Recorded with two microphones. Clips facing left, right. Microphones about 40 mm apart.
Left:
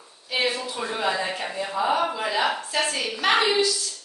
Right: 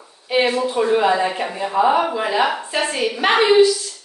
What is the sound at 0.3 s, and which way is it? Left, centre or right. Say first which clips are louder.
Speech: right 8 dB; right.